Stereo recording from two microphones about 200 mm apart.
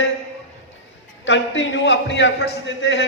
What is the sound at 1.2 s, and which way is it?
A man's voice, 65° left (ahead or behind).